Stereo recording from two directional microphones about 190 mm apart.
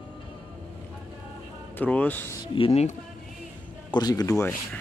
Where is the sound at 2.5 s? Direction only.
30° left (ahead or behind).